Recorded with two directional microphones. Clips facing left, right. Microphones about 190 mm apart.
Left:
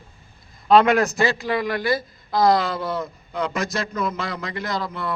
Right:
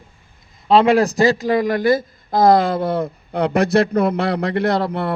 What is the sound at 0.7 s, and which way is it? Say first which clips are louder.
A man's voice: right 3 dB; 30° right (ahead or behind).